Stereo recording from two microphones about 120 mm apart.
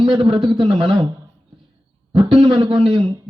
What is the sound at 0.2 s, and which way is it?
Speech, 50° right (ahead or behind).